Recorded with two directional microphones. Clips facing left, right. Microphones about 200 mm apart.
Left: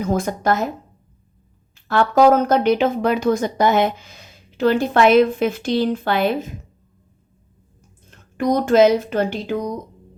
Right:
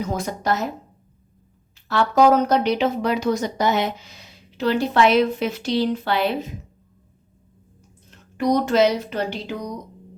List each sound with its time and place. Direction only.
0.0 s speech: 50° left (ahead or behind)
1.9 s speech: 50° left (ahead or behind)
8.1 s speech: 50° left (ahead or behind)